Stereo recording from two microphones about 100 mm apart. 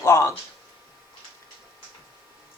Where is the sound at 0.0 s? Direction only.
30° left (ahead or behind).